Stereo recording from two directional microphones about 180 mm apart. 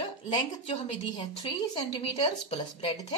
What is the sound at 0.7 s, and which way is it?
A woman's voice, 30° left (ahead or behind).